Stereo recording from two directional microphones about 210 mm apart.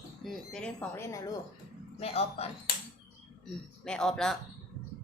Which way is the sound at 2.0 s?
30° left (ahead or behind).